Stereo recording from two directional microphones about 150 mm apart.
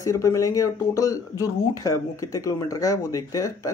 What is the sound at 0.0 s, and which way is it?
A woman's voice, 20° left (ahead or behind).